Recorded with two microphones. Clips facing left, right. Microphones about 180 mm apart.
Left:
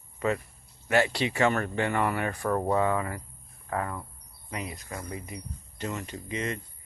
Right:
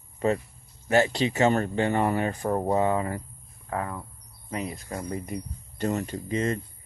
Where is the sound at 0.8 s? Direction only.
40° right (ahead or behind).